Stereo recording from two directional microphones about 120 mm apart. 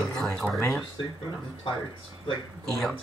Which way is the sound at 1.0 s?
45° left (ahead or behind).